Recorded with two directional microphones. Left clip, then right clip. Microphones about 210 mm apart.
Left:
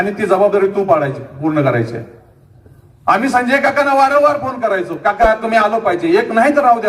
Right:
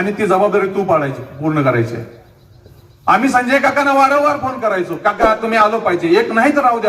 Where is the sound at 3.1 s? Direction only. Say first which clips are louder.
Even; 35° left (ahead or behind).